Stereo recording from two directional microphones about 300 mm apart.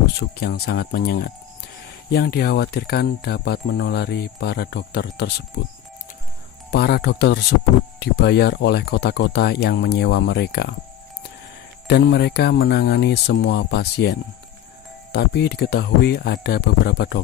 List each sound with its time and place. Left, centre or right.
0.2 s speech: left
6.7 s speech: left
11.9 s speech: left
15.1 s speech: left